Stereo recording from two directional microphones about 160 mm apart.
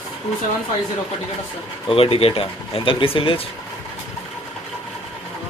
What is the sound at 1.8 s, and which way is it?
Speech, 35° left (ahead or behind).